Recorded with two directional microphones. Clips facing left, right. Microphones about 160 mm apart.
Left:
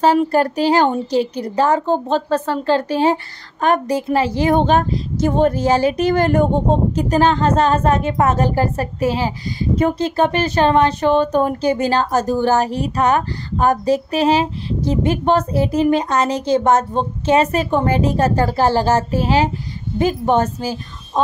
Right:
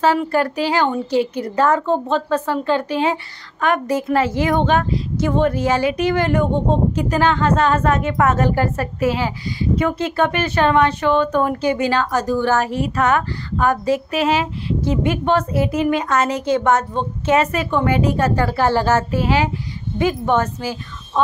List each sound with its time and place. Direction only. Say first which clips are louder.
0.0 s a woman's voice: left 3 dB; 40° left (ahead or behind)